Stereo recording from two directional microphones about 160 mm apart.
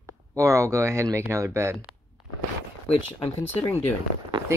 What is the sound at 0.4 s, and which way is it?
Speech, 20° right (ahead or behind).